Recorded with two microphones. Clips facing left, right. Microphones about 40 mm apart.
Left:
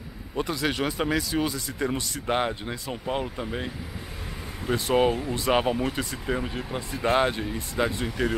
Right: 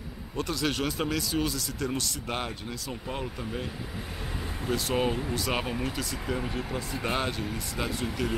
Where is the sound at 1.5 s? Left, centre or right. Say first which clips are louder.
Left 3 dB; left.